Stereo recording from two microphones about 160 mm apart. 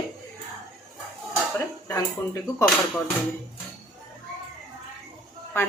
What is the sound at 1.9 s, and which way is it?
Speech, 20° left (ahead or behind).